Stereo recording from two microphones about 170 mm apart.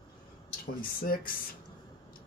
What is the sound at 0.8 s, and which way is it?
Speech, 55° left (ahead or behind).